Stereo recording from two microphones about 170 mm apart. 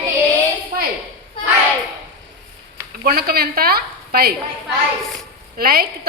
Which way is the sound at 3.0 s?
60° right (ahead or behind).